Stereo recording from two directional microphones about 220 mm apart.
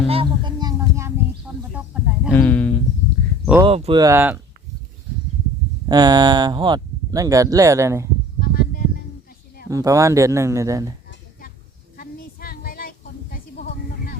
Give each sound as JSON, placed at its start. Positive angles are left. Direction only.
{"t": 0.1, "sound": "a sound", "side_deg": -25}
{"t": 1.7, "sound": "snake", "side_deg": -5}
{"t": 2.3, "sound": "speech", "side_deg": 10}
{"t": 3.6, "sound": "speech", "side_deg": -25}
{"t": 5.9, "sound": "speech", "side_deg": -20}
{"t": 8.4, "sound": "music", "side_deg": 45}
{"t": 9.6, "sound": "speech", "side_deg": -15}
{"t": 11.9, "sound": "child singing", "side_deg": 40}